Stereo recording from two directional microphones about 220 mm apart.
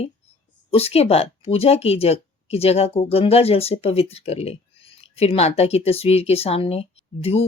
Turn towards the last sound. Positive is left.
turn(degrees=25)  # may be behind; listen again after turning